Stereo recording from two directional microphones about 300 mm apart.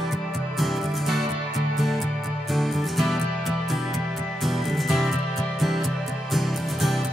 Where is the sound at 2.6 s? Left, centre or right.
Centre.